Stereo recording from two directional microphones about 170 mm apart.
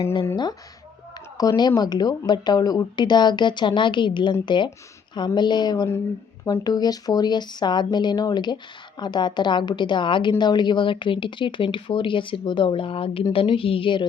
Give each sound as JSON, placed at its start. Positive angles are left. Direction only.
{"t": 0.0, "sound": "a woman's voice", "side_deg": 30}
{"t": 1.4, "sound": "a woman's voice", "side_deg": 25}